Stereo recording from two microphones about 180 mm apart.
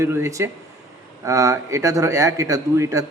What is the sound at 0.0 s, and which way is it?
A man's voice, 15° right (ahead or behind).